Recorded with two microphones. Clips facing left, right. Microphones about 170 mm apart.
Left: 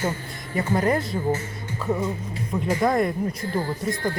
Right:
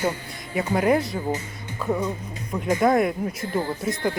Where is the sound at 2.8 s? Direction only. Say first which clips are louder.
Right 2 dB; centre (ahead or behind).